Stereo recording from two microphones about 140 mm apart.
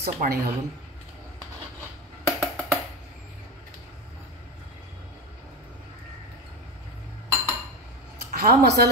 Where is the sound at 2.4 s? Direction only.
5° left (ahead or behind).